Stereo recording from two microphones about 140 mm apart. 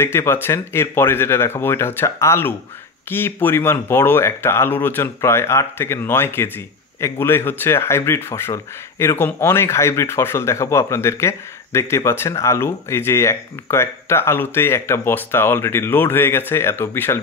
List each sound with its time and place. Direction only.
0.0 s speech: 20° left (ahead or behind)